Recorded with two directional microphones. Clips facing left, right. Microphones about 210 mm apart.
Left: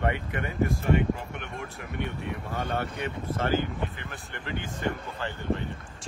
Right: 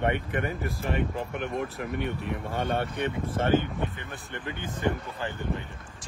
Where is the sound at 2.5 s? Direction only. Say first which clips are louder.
Right 3 dB; 30° right (ahead or behind).